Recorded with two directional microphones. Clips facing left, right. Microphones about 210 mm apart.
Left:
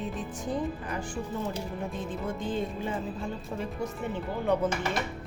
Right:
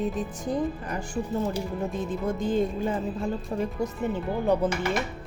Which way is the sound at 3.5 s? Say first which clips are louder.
Right 5 dB; 40° right (ahead or behind).